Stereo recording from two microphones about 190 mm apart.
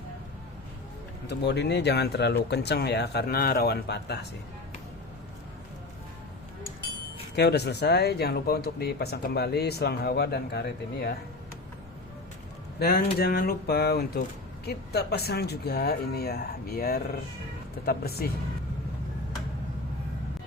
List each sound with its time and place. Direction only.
1.3 s speech: 60° left (ahead or behind)
7.3 s speech: 60° left (ahead or behind)
12.8 s speech: 55° left (ahead or behind)